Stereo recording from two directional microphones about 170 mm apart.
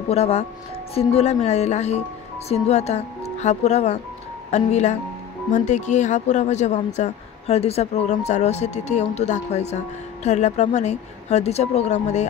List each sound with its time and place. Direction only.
0.1 s speech: 40° left (ahead or behind)